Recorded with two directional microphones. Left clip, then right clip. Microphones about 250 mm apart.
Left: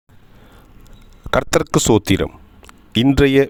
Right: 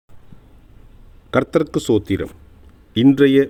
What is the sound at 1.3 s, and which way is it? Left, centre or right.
Speech, left.